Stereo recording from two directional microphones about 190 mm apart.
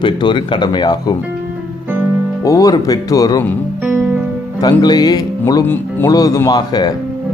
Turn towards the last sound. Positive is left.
turn(degrees=20)  # may be behind; listen again after turning